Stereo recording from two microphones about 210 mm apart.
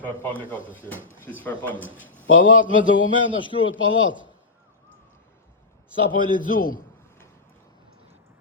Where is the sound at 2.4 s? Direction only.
40° left (ahead or behind).